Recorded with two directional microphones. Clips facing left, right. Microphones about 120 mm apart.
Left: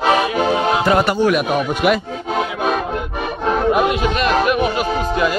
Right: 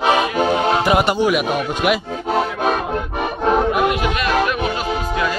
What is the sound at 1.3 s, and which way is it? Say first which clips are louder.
Speech: left 2 dB; 5° right (ahead or behind).